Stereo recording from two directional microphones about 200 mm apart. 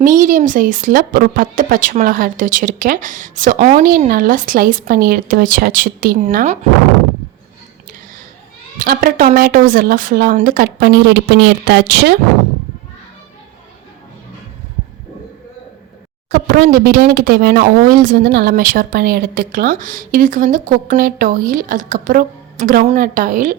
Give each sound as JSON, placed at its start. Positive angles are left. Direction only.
{"t": 0.0, "sound": "speech", "side_deg": -40}
{"t": 8.8, "sound": "speech", "side_deg": -45}
{"t": 16.3, "sound": "speech", "side_deg": -45}